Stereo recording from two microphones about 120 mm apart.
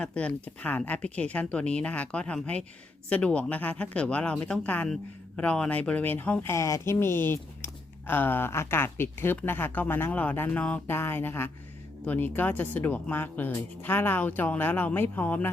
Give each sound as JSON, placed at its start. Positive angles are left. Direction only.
{"t": 0.0, "sound": "speech", "side_deg": 10}